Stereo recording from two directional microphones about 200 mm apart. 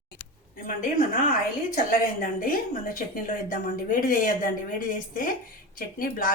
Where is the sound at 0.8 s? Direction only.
40° left (ahead or behind).